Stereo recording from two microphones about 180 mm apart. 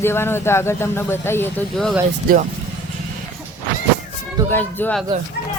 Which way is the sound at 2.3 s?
55° right (ahead or behind).